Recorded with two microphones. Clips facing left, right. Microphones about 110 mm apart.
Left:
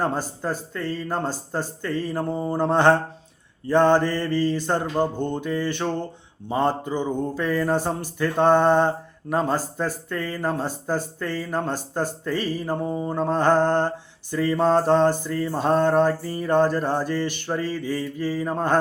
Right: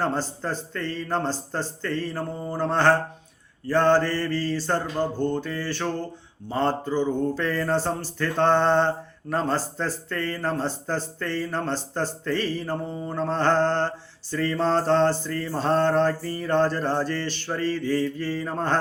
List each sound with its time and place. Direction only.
0.0 s a man's voice: 10° left (ahead or behind)